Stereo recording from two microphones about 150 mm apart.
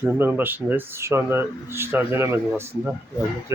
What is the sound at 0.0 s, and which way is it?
Speech, 10° right (ahead or behind).